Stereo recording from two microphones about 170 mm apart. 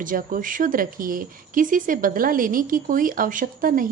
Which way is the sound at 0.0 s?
55° right (ahead or behind).